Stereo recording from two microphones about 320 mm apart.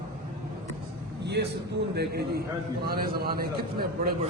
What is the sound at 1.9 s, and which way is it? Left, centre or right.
A man's voice, right.